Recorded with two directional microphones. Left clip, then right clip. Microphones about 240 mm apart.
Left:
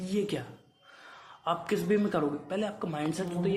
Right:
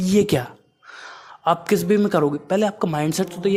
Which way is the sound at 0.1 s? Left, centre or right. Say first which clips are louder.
Right 13 dB; right.